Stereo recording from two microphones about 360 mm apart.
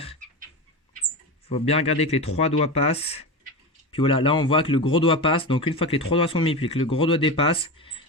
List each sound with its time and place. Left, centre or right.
1.5 s speech: centre